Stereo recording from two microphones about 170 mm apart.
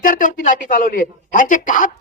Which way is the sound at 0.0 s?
50° left (ahead or behind).